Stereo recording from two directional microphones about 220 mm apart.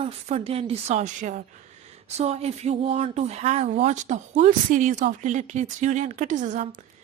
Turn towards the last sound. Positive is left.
turn(degrees=-35)  # may be behind; listen again after turning